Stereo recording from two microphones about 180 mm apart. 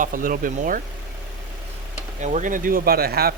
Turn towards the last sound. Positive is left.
turn(degrees=-60)  # may be behind; listen again after turning